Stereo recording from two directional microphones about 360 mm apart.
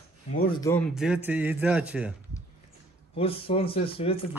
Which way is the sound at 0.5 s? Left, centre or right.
Centre.